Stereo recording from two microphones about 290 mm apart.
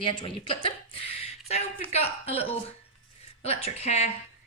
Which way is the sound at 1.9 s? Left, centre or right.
Left.